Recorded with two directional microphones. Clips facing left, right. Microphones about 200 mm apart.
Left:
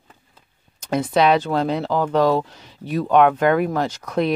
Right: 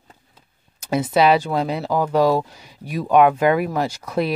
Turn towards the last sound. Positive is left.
turn(degrees=-5)  # may be behind; listen again after turning